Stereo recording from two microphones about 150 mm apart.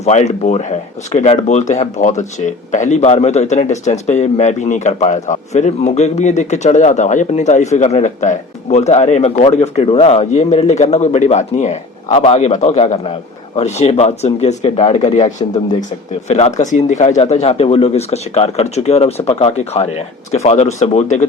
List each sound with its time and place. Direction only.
0.0 s a man's voice: 50° left (ahead or behind)
16.6 s a man's voice: 55° left (ahead or behind)